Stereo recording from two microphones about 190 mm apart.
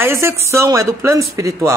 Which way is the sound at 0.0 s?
15° right (ahead or behind).